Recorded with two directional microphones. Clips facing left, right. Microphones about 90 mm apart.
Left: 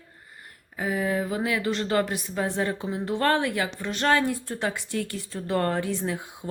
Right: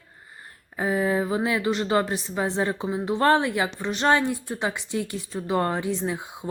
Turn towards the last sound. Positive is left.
turn(degrees=-20)  # may be behind; listen again after turning